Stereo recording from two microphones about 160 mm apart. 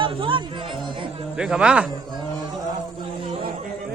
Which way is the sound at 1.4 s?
5° right (ahead or behind).